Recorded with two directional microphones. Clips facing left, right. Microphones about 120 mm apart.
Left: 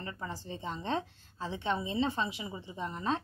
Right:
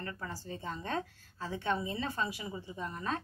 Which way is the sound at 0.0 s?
20° left (ahead or behind).